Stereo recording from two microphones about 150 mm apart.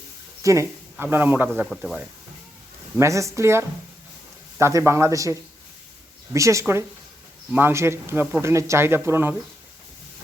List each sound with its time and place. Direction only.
0.4 s speech: 20° right (ahead or behind)
1.7 s speech: centre (ahead or behind)
3.0 s speech: 20° right (ahead or behind)